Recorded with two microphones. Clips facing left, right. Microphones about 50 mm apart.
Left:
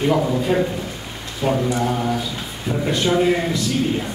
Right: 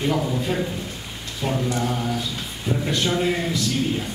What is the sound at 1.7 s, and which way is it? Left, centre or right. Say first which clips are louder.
Speech: left 4 dB; centre.